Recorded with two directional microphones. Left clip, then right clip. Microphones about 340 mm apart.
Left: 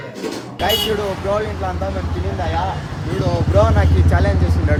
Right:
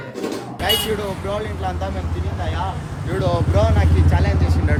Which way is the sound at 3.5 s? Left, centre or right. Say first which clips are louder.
Left 4 dB; centre.